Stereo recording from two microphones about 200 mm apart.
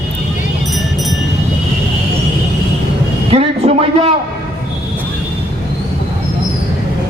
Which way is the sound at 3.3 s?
30° right (ahead or behind).